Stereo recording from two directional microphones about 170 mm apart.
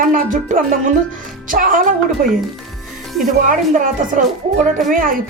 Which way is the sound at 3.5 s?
50° right (ahead or behind).